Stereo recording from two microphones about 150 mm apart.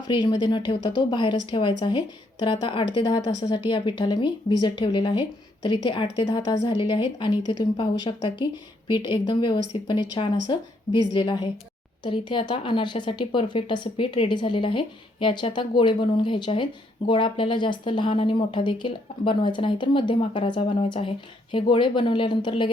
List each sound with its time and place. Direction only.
0.1 s a woman's voice: 30° left (ahead or behind)